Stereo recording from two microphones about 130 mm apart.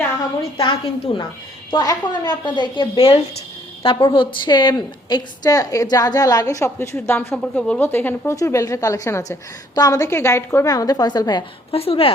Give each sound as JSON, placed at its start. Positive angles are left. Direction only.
{"t": 0.5, "sound": "a woman's voice", "side_deg": 40}
{"t": 11.7, "sound": "speech", "side_deg": 50}